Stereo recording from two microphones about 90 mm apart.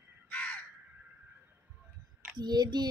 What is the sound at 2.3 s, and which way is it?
Speech, 50° right (ahead or behind).